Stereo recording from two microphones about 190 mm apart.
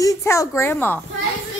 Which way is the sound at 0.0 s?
15° left (ahead or behind).